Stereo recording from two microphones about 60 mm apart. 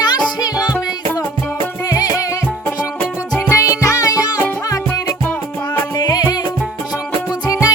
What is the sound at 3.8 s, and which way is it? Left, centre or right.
Music, left.